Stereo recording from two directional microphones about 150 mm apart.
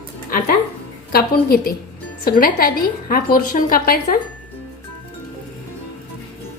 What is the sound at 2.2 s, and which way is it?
A woman's voice, 75° left (ahead or behind).